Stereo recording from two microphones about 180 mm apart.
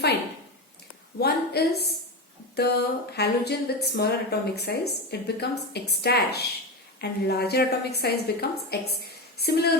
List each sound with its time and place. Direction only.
1.2 s a woman's voice: 65° left (ahead or behind)